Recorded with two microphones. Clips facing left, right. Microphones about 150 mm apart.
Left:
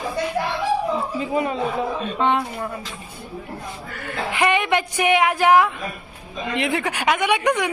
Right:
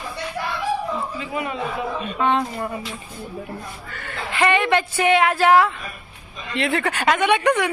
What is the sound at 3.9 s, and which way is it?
A woman's voice, 10° left (ahead or behind).